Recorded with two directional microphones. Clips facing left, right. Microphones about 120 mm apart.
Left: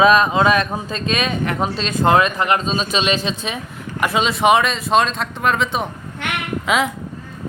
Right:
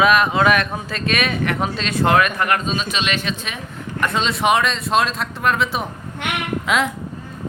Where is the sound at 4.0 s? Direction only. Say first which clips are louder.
Left 3 dB; 5° left (ahead or behind).